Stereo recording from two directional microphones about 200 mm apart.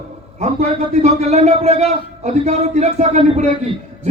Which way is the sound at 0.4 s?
35° right (ahead or behind).